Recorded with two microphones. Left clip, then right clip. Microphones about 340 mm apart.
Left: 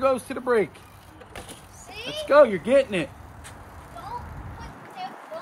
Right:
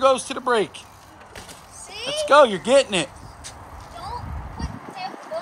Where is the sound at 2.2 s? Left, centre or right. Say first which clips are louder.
Right 2 dB; centre.